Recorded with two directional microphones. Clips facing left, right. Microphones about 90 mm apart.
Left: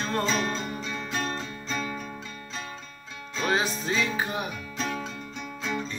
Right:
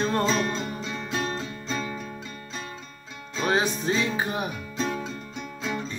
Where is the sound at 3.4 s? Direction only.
25° right (ahead or behind).